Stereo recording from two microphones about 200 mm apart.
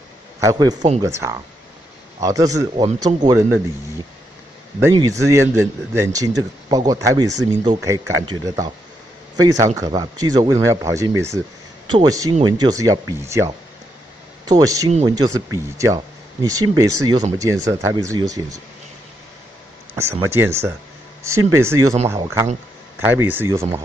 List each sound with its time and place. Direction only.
0.4 s speech: 20° right (ahead or behind)
4.9 s speech: 15° right (ahead or behind)
20.0 s speech: 10° right (ahead or behind)